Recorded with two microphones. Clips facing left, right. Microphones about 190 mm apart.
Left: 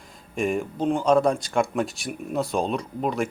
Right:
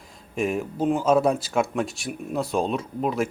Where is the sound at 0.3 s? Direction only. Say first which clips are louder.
Even; centre (ahead or behind).